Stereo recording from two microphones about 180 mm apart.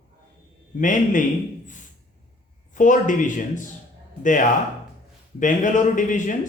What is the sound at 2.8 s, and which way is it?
Speech, 45° left (ahead or behind).